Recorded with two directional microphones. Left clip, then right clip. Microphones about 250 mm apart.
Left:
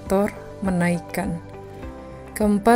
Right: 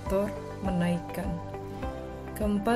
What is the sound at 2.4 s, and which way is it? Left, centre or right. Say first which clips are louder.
Speech: left 11 dB; left.